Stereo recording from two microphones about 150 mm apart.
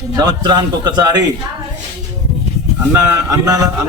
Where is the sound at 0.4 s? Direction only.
30° right (ahead or behind).